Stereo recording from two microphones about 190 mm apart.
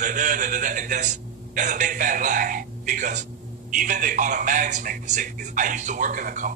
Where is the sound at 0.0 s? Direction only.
45° right (ahead or behind).